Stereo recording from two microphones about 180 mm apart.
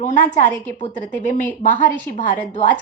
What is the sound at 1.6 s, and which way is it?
Speech, 45° left (ahead or behind).